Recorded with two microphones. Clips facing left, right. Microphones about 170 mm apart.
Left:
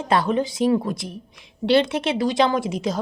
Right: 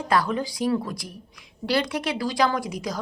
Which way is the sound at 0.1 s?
25° left (ahead or behind).